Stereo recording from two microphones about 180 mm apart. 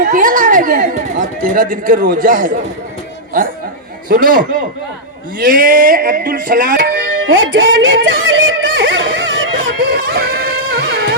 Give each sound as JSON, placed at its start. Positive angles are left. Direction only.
{"t": 0.0, "sound": "speech", "side_deg": -50}
{"t": 4.1, "sound": "speech", "side_deg": -50}
{"t": 6.7, "sound": "speech", "side_deg": -85}
{"t": 10.2, "sound": "a sound", "side_deg": -55}
{"t": 10.7, "sound": "music", "side_deg": -55}